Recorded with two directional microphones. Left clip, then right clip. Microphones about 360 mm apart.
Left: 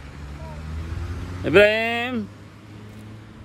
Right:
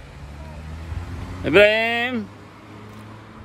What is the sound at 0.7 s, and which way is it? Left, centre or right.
Vehicle, right.